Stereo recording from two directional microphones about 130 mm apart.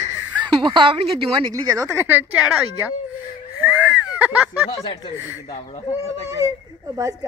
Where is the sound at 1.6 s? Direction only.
25° right (ahead or behind).